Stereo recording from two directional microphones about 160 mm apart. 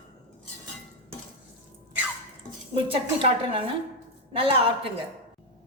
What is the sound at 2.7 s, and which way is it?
A woman's voice, 35° right (ahead or behind).